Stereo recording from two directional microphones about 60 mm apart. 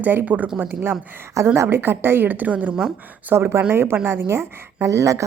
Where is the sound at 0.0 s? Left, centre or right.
Right.